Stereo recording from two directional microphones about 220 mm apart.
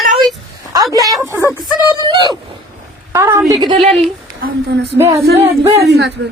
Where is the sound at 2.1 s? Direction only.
20° right (ahead or behind).